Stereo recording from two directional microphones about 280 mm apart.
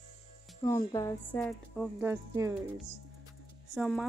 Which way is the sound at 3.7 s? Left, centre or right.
Centre.